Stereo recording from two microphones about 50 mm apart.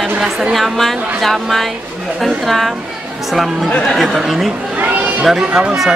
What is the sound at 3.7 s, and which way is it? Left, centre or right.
Speech, centre.